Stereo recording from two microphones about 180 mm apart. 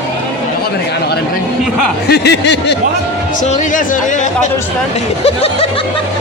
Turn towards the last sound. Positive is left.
turn(degrees=35)  # may be behind; listen again after turning